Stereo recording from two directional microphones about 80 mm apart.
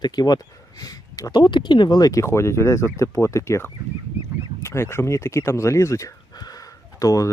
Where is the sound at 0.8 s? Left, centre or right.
Left.